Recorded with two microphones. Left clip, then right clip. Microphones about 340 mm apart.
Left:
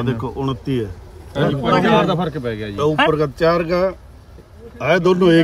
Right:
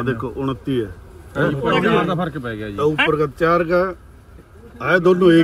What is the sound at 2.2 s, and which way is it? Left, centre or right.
Speech, left.